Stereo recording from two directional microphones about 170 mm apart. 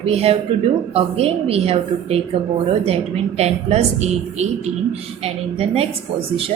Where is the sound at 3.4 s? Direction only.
40° right (ahead or behind).